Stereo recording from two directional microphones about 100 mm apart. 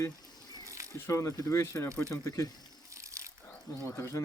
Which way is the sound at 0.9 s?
30° left (ahead or behind).